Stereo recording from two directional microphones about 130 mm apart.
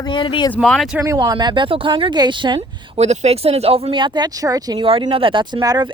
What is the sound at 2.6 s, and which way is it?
Speech, 55° right (ahead or behind).